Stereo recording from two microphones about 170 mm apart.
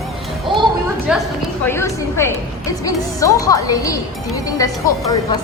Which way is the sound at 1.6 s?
15° left (ahead or behind).